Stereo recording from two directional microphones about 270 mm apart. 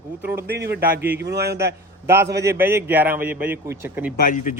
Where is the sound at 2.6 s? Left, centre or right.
Centre.